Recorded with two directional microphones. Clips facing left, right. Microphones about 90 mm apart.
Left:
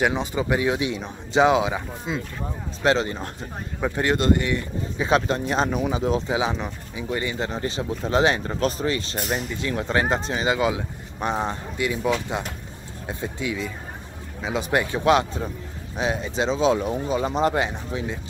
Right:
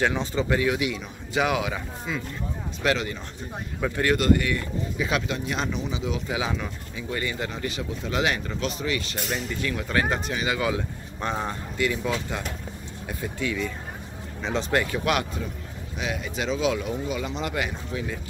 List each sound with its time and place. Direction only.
0.0 s speech: 15° left (ahead or behind); by 3.3 s 35° left (ahead or behind)
3.8 s speech: 20° left (ahead or behind)
5.8 s speech: 50° left (ahead or behind)
6.2 s speech: 25° left (ahead or behind)
14.4 s speech: 10° left (ahead or behind)
14.7 s speech: 20° left (ahead or behind)